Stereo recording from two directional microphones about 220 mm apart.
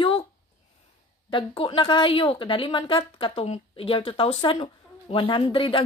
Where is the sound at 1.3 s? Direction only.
20° left (ahead or behind).